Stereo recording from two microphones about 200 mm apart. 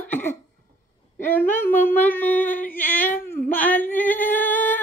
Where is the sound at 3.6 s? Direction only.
10° left (ahead or behind).